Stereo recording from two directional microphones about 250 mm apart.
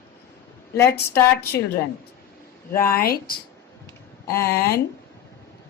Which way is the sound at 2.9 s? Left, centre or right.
Left.